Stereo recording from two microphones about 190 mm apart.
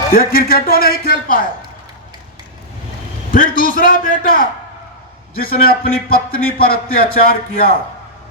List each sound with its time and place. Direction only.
0.1 s a man's voice: 50° left (ahead or behind)
3.3 s a man's voice: 45° left (ahead or behind)